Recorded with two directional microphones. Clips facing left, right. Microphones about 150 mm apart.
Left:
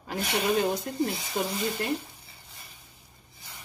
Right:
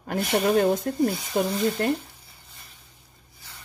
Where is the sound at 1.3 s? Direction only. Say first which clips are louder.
Right 6 dB; 50° right (ahead or behind).